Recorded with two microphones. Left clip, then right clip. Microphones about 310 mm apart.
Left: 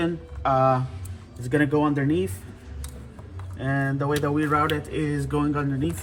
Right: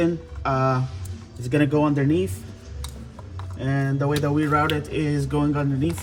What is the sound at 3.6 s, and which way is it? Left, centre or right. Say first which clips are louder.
Speech: even; centre.